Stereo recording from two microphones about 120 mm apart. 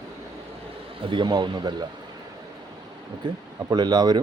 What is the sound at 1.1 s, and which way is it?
Speech, 40° right (ahead or behind).